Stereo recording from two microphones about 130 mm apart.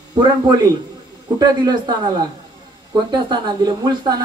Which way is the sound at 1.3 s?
30° right (ahead or behind).